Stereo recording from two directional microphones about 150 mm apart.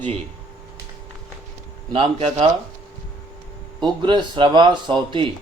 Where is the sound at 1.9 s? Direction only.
40° right (ahead or behind).